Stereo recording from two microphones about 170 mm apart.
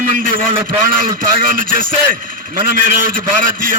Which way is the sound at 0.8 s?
55° right (ahead or behind).